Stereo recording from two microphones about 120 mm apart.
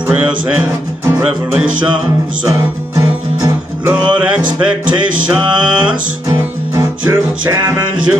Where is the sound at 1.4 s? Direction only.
10° right (ahead or behind).